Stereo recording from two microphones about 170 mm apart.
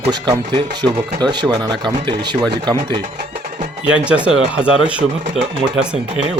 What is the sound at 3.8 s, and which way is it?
Speech, 5° right (ahead or behind).